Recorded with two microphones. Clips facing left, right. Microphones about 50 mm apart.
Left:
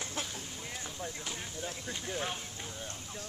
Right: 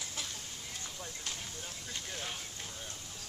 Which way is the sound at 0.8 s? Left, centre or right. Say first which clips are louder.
Left 3 dB; centre.